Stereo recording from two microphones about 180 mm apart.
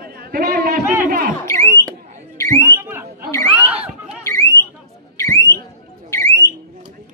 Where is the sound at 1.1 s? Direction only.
50° right (ahead or behind).